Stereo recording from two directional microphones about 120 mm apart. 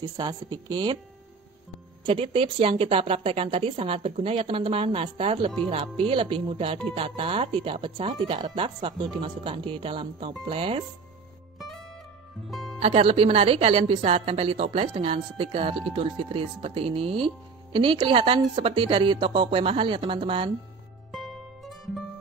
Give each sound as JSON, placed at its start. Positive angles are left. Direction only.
{"t": 0.0, "sound": "a woman's voice", "side_deg": -35}
{"t": 2.0, "sound": "a woman's voice", "side_deg": -50}
{"t": 11.5, "sound": "music", "side_deg": 0}
{"t": 12.8, "sound": "a woman's voice", "side_deg": -55}
{"t": 21.1, "sound": "music", "side_deg": 0}